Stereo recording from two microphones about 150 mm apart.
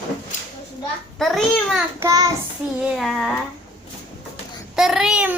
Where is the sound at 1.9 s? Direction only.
20° right (ahead or behind).